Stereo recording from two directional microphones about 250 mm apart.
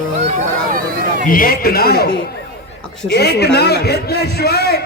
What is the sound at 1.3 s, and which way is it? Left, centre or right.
Speech, left.